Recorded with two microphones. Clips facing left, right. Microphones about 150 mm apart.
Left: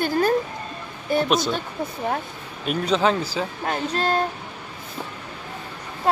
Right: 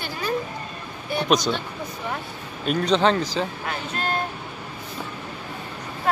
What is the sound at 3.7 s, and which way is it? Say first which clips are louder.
Speech: left 5 dB; 35° left (ahead or behind).